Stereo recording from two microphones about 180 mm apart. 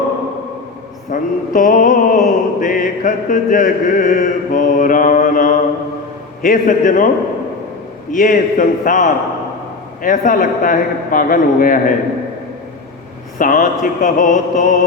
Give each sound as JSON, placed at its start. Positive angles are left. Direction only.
{"t": 1.1, "sound": "mantra", "side_deg": 45}
{"t": 8.1, "sound": "mantra", "side_deg": 45}
{"t": 13.4, "sound": "mantra", "side_deg": 50}